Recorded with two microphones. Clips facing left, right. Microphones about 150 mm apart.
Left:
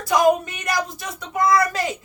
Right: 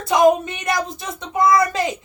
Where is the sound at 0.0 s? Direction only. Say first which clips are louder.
Right 3 dB; 25° right (ahead or behind).